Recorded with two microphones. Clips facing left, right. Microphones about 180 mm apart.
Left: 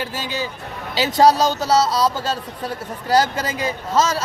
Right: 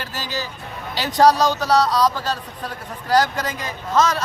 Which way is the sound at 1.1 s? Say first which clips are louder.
Even; 25° left (ahead or behind).